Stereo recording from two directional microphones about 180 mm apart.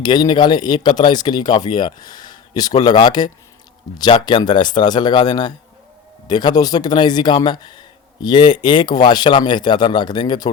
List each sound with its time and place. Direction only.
0.0 s speech: 25° left (ahead or behind)